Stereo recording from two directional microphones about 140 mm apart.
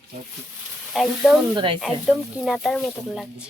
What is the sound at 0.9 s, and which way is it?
Speech, centre (ahead or behind).